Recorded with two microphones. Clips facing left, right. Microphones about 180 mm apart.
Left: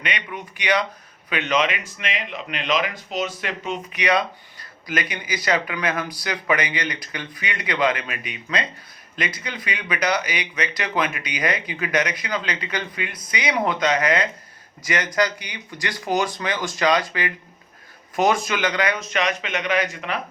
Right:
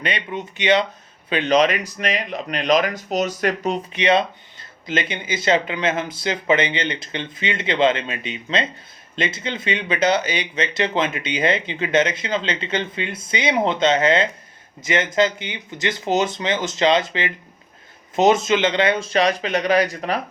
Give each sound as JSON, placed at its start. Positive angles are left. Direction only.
{"t": 0.0, "sound": "speech", "side_deg": -30}
{"t": 3.9, "sound": "speech", "side_deg": -25}